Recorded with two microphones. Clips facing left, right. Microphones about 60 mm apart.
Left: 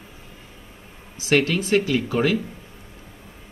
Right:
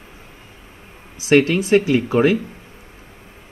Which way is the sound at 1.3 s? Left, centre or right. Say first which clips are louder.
Right 5 dB; right.